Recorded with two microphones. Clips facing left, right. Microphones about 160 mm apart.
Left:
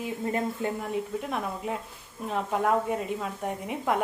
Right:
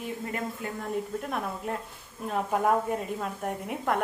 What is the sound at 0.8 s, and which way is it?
A woman's voice, 5° left (ahead or behind).